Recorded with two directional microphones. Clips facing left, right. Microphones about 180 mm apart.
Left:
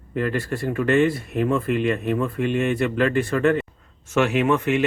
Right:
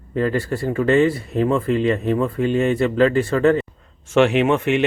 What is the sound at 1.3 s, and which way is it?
Speech, 30° right (ahead or behind).